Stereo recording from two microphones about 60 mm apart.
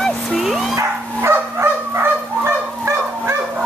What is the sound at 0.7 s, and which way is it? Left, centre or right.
Dog, right.